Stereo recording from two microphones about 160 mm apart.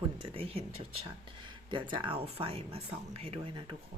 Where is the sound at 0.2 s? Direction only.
35° right (ahead or behind).